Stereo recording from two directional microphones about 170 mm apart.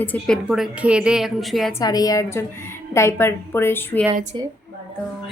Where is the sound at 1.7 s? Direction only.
20° left (ahead or behind).